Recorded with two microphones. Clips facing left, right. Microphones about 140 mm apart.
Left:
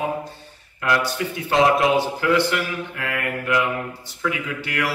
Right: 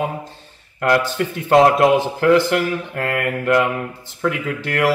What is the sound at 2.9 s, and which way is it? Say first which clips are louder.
A man's voice: right 5 dB; 45° right (ahead or behind).